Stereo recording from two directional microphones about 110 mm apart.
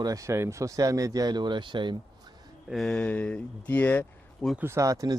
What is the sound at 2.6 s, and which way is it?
Speech, centre (ahead or behind).